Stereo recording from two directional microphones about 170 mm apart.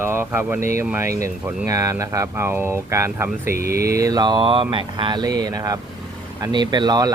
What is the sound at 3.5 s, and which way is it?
Speech, 60° right (ahead or behind).